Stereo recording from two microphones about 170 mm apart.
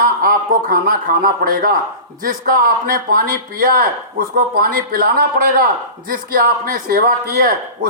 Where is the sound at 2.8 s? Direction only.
55° right (ahead or behind).